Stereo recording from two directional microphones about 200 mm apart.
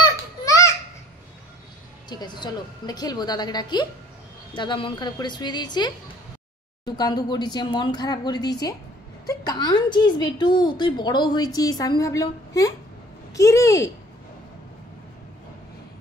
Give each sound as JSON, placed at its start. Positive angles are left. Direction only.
{"t": 2.0, "sound": "a woman's voice", "side_deg": 20}